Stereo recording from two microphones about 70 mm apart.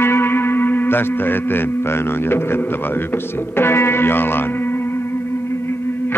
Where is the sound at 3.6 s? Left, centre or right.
Left.